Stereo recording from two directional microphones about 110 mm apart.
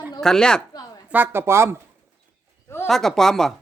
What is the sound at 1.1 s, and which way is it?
Speech, 20° right (ahead or behind).